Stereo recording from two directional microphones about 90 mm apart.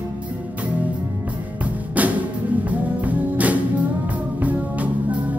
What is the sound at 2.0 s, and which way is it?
Music, 15° right (ahead or behind).